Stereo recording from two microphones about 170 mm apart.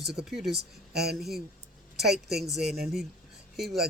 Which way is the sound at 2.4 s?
Centre (ahead or behind).